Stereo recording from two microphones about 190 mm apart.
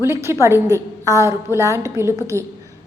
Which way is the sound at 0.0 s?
15° right (ahead or behind).